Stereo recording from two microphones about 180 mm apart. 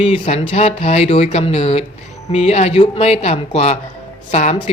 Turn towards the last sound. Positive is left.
turn(degrees=40)  # may be behind; listen again after turning